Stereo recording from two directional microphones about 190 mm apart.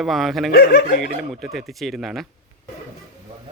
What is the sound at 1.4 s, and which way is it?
Speech, centre (ahead or behind).